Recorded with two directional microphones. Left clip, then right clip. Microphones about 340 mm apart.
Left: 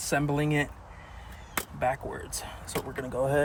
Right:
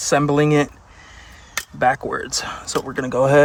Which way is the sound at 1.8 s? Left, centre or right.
Right.